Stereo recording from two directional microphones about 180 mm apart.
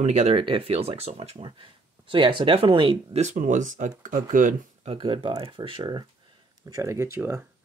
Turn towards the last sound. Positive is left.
turn(degrees=-15)  # may be behind; listen again after turning